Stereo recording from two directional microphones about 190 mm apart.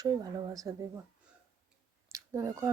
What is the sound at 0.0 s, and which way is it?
Speech, 20° right (ahead or behind).